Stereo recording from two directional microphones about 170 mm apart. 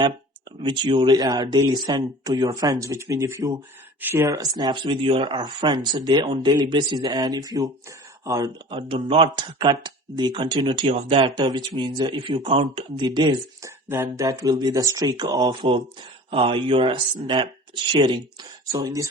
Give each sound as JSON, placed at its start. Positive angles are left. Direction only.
{"t": 0.6, "sound": "speech", "side_deg": -30}